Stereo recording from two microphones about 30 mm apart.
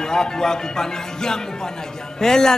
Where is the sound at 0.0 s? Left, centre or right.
Left.